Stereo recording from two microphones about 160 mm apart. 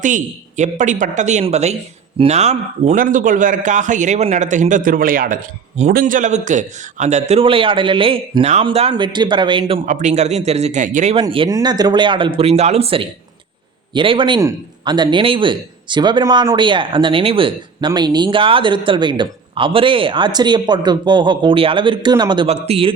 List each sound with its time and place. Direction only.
0.0 s a man's voice: 50° right (ahead or behind); by 9.8 s 35° right (ahead or behind)
9.8 s a man's voice: 50° right (ahead or behind)
11.1 s speech: 35° right (ahead or behind)
22.4 s speech: 40° right (ahead or behind)